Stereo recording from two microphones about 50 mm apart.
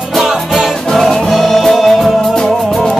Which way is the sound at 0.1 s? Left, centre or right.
Centre.